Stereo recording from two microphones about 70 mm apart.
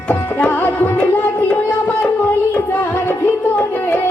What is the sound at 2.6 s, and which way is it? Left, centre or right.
Music, left.